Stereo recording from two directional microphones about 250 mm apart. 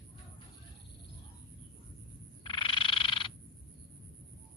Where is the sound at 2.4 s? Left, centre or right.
Centre.